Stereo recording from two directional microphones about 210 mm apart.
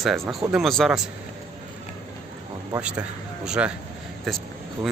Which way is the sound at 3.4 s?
5° right (ahead or behind).